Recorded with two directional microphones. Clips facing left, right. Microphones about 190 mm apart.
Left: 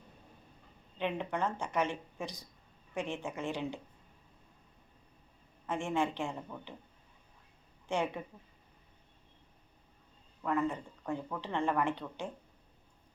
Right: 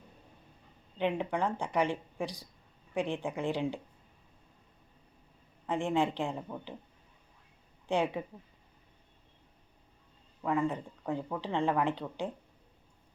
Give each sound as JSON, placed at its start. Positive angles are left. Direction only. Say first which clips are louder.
{"t": 0.9, "sound": "speech", "louder": "right 3 dB", "side_deg": -15}
{"t": 5.6, "sound": "speech", "louder": "right 3 dB", "side_deg": -15}
{"t": 7.9, "sound": "speech", "louder": "right 4 dB", "side_deg": -15}
{"t": 10.4, "sound": "speech", "louder": "right 2 dB", "side_deg": -15}